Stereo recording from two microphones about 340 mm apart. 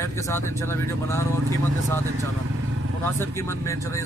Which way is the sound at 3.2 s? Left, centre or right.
Centre.